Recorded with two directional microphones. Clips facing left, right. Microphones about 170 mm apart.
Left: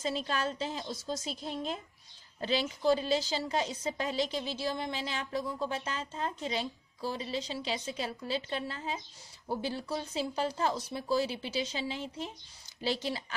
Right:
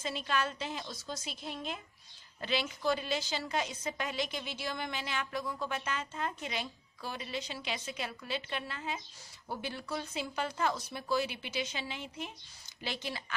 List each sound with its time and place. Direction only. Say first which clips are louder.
0.0 s a woman's voice: left 2 dB; 35° left (ahead or behind)